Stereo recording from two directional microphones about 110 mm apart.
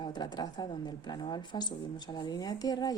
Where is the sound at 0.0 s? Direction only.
40° left (ahead or behind).